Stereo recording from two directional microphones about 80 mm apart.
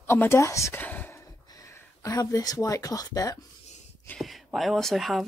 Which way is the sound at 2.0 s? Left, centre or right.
Left.